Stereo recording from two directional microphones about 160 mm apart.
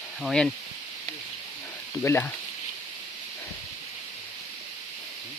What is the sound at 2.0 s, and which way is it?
Speech, 15° left (ahead or behind).